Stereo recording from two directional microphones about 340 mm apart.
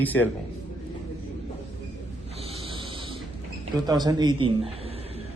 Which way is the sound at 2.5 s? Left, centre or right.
Centre.